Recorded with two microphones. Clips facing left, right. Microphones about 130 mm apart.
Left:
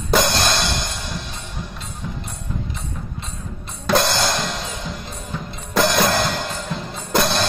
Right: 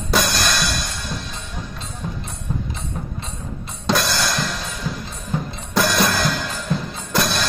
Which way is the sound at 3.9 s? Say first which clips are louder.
Left 2 dB; 25° left (ahead or behind).